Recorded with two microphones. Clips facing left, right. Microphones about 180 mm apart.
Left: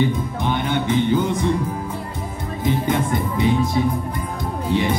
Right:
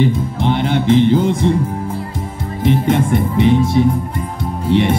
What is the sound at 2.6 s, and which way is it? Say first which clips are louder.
Music: right 6 dB; 25° right (ahead or behind).